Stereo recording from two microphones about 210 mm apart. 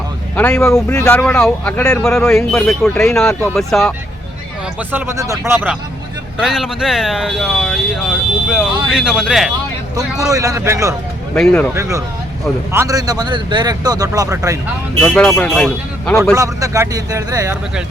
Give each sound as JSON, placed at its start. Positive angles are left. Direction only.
{"t": 0.3, "sound": "speech", "side_deg": 5}
{"t": 4.9, "sound": "a man's voice", "side_deg": -10}
{"t": 10.2, "sound": "a man's voice", "side_deg": -15}
{"t": 15.0, "sound": "speech", "side_deg": 5}
{"t": 16.3, "sound": "a man's voice", "side_deg": -15}